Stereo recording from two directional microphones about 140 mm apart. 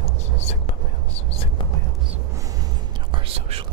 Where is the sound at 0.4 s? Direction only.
50° left (ahead or behind).